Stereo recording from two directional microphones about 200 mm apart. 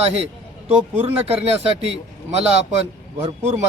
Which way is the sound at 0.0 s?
30° right (ahead or behind).